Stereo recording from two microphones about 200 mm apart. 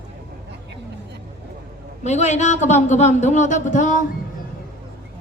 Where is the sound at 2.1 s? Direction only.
35° left (ahead or behind).